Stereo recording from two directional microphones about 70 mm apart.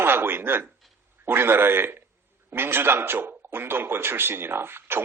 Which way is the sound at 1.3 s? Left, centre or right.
Right.